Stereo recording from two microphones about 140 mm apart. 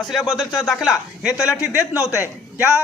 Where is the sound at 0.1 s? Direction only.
Centre (ahead or behind).